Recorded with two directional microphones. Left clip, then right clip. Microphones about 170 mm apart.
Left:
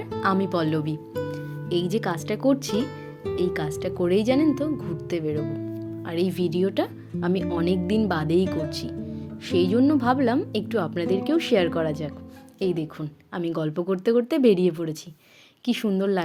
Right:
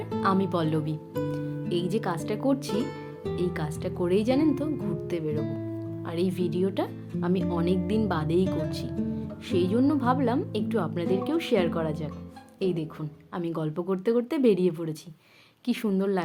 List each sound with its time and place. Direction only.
0.2 s speech: 25° left (ahead or behind)
2.7 s music: centre (ahead or behind)
3.3 s a woman's voice: 30° left (ahead or behind)
8.4 s speech: centre (ahead or behind)
9.5 s a woman's voice: 30° left (ahead or behind)